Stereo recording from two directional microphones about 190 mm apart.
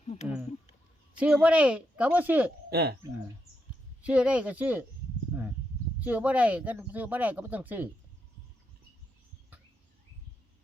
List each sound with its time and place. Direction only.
0.0 s a sound: 35° left (ahead or behind)
1.2 s speech: 5° right (ahead or behind)
2.6 s speech: 55° right (ahead or behind)
4.0 s speech: 5° right (ahead or behind)
5.3 s a sound: 10° right (ahead or behind)
6.0 s speech: 10° right (ahead or behind)